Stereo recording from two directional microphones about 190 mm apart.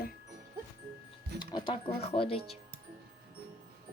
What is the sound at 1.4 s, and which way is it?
Speech, 25° left (ahead or behind).